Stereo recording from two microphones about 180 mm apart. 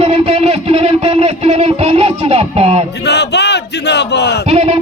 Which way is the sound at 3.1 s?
70° left (ahead or behind).